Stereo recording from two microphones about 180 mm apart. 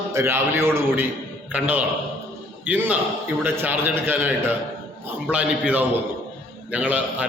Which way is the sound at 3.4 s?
10° right (ahead or behind).